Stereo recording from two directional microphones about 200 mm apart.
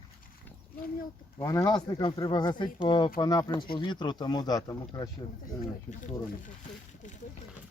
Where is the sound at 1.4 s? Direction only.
15° left (ahead or behind).